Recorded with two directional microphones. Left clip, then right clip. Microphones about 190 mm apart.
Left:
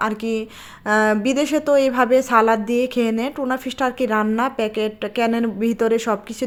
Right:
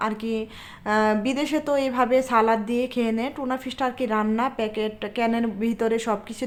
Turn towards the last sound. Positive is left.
turn(degrees=25)  # may be behind; listen again after turning